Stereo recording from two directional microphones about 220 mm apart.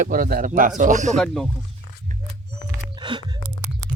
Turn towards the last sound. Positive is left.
turn(degrees=-20)  # may be behind; listen again after turning